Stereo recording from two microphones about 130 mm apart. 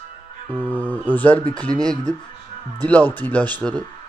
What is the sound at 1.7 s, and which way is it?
Speech, 30° right (ahead or behind).